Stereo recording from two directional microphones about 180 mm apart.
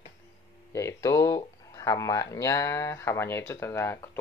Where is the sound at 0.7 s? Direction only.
15° left (ahead or behind).